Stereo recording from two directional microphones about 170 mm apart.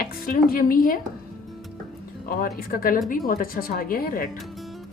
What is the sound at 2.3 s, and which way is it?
A woman's voice, 60° left (ahead or behind).